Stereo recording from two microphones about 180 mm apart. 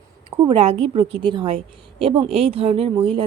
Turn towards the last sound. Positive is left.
turn(degrees=-30)  # may be behind; listen again after turning